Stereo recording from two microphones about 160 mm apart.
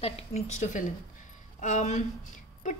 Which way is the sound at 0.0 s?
45° left (ahead or behind).